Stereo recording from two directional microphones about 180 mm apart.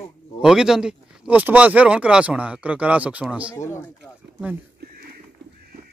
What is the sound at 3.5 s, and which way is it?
Speech, 15° left (ahead or behind).